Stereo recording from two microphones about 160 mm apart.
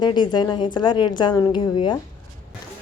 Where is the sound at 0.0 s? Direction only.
30° left (ahead or behind).